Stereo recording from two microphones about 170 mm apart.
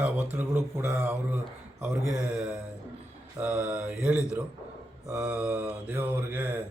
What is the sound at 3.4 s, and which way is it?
Mantra, 5° right (ahead or behind).